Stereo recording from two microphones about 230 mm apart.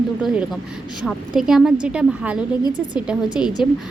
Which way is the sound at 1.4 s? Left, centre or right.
Centre.